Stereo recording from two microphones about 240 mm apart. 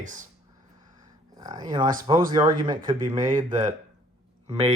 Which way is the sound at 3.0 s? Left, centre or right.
Right.